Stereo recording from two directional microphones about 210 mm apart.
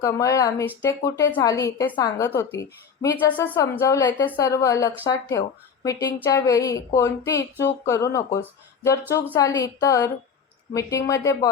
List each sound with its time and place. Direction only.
0.0 s a woman's voice: 15° left (ahead or behind)